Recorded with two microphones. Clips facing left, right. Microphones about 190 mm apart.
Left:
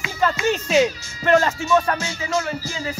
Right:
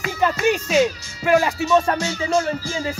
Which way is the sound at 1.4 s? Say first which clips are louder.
Right 1 dB; 20° right (ahead or behind).